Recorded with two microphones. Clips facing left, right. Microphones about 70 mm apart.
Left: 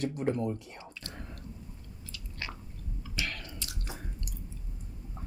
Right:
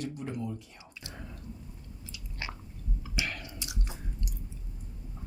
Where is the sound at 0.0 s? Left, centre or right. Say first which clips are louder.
Left 6 dB; left.